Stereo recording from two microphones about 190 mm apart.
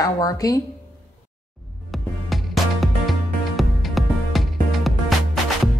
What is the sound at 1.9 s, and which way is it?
Music, centre (ahead or behind).